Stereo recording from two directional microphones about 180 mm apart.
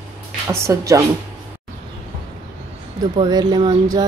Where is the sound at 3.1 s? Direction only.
25° right (ahead or behind).